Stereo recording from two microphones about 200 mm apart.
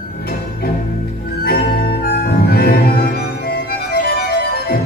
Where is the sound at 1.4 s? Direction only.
50° left (ahead or behind).